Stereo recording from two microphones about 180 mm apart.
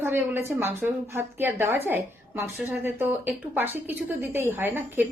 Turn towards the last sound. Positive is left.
turn(degrees=-10)  # may be behind; listen again after turning